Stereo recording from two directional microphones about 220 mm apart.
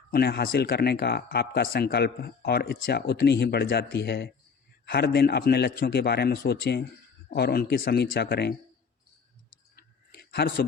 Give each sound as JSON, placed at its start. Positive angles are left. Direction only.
{"t": 0.1, "sound": "speech", "side_deg": 45}
{"t": 9.7, "sound": "clicking", "side_deg": 45}